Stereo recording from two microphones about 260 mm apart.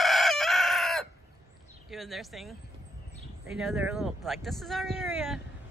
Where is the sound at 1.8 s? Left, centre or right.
Centre.